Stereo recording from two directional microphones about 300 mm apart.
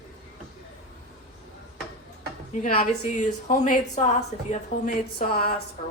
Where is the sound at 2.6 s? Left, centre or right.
Left.